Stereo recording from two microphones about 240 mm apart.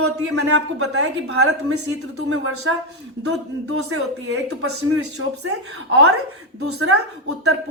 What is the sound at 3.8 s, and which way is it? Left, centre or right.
A woman's voice, right.